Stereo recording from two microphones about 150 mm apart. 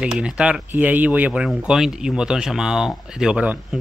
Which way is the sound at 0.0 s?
5° right (ahead or behind).